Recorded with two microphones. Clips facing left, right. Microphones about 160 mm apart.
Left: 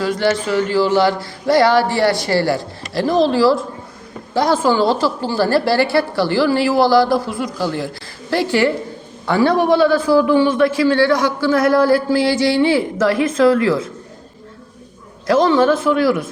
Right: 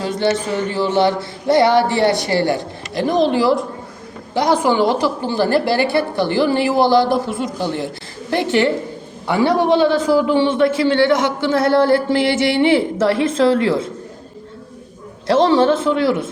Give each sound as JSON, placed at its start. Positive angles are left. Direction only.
{"t": 0.0, "sound": "a man's voice", "side_deg": -20}
{"t": 15.3, "sound": "a man's voice", "side_deg": -30}